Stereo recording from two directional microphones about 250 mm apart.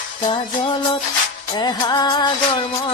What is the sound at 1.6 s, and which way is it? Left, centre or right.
Speech, centre.